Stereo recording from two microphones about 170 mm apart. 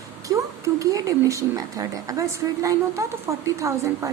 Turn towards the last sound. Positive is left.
turn(degrees=-15)  # may be behind; listen again after turning